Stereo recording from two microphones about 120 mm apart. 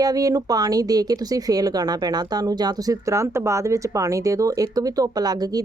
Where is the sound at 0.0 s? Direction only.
30° right (ahead or behind).